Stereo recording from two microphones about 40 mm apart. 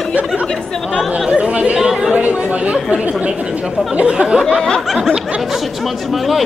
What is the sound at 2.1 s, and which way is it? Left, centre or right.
Speech, right.